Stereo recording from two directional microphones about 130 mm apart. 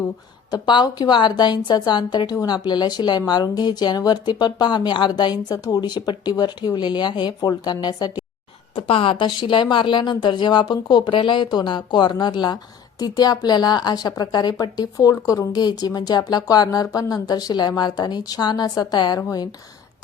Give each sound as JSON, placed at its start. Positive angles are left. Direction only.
{"t": 0.5, "sound": "speech", "side_deg": 35}
{"t": 8.7, "sound": "speech", "side_deg": 45}